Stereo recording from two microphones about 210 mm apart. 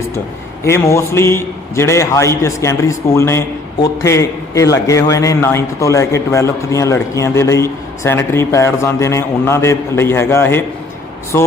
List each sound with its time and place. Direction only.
0.6 s a man's voice: 15° left (ahead or behind)